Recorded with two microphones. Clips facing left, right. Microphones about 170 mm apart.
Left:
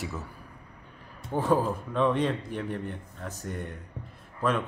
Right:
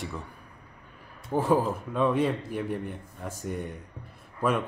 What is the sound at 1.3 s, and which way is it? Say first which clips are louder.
Speech: right 1 dB; 5° right (ahead or behind).